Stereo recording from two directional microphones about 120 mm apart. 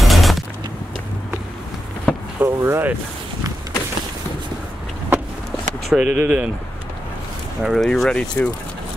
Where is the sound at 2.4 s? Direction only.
20° right (ahead or behind).